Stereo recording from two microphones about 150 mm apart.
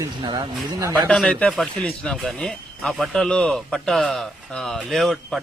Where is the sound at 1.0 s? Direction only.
5° left (ahead or behind).